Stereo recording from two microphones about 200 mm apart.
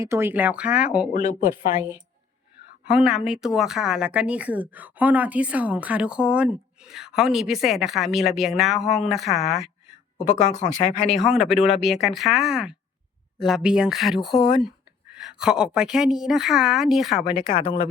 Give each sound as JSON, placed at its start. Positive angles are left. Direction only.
{"t": 0.0, "sound": "speech", "side_deg": -15}
{"t": 1.1, "sound": "speech", "side_deg": 45}
{"t": 1.7, "sound": "a woman's voice", "side_deg": -10}
{"t": 10.2, "sound": "speech", "side_deg": 40}
{"t": 11.1, "sound": "a woman's voice", "side_deg": 0}
{"t": 15.4, "sound": "a woman's voice", "side_deg": -5}
{"t": 17.2, "sound": "speech", "side_deg": 25}